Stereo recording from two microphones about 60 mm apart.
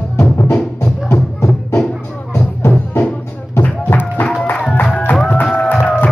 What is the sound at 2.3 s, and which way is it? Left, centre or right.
Music, left.